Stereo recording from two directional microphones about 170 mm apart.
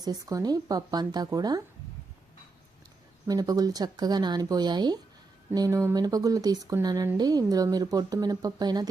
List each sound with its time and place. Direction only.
0.0 s speech: 20° right (ahead or behind)
3.2 s speech: 20° right (ahead or behind)